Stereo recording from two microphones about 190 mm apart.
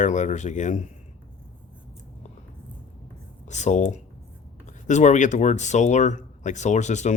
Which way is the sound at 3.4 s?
40° left (ahead or behind).